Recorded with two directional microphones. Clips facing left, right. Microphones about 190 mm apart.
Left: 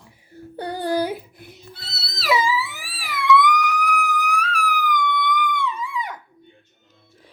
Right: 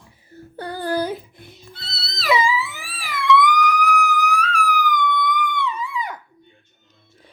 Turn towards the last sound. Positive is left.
turn(degrees=0)  # may be behind; listen again after turning